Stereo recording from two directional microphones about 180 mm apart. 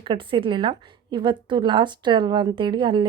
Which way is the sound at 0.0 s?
25° right (ahead or behind).